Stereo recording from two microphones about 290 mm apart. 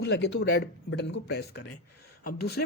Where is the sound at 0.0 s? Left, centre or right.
Left.